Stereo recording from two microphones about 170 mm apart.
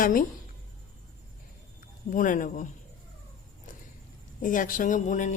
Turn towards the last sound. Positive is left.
turn(degrees=45)  # may be behind; listen again after turning